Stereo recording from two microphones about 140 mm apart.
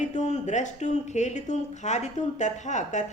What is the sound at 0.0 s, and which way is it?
Speech, 60° left (ahead or behind).